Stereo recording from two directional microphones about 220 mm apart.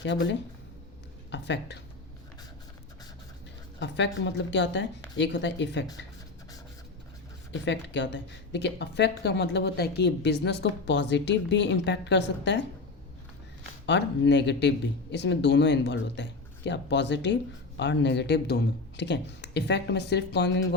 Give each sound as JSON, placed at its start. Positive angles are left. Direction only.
{"t": 1.3, "sound": "speech", "side_deg": 50}
{"t": 3.8, "sound": "speech", "side_deg": 55}
{"t": 7.6, "sound": "speech", "side_deg": 55}
{"t": 13.8, "sound": "speech", "side_deg": 50}